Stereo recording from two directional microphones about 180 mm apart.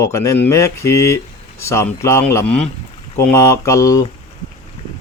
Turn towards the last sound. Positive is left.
turn(degrees=15)  # may be behind; listen again after turning